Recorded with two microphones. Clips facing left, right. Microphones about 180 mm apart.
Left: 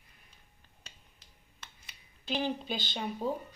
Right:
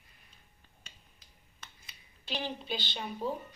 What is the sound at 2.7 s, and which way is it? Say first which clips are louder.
Speech: left 1 dB; 45° left (ahead or behind).